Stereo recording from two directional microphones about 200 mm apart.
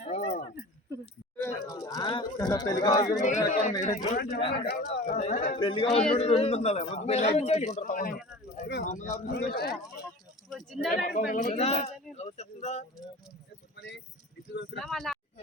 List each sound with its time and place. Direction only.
0.1 s keys jangling: 35° left (ahead or behind)
1.4 s speech: 15° left (ahead or behind)
3.2 s a man's voice: 35° left (ahead or behind)
5.5 s a man's voice: 25° left (ahead or behind)
8.1 s a sound: 5° right (ahead or behind)
8.8 s a man's voice: 35° left (ahead or behind)
9.2 s speech: 55° left (ahead or behind)
10.5 s a sound: centre (ahead or behind)
10.9 s a man's voice: 45° left (ahead or behind)
13.7 s speech: 60° left (ahead or behind)
14.8 s speech: centre (ahead or behind)